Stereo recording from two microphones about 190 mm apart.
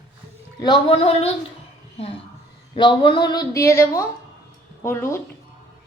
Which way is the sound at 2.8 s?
25° left (ahead or behind).